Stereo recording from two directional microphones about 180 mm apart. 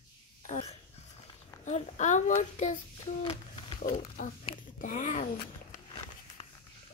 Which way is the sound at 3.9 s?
45° left (ahead or behind).